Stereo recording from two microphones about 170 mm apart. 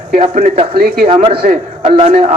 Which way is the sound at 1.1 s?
30° right (ahead or behind).